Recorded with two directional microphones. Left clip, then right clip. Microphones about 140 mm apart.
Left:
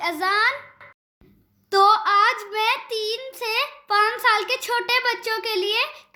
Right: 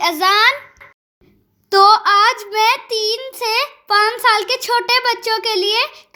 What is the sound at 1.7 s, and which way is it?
Child singing, 35° right (ahead or behind).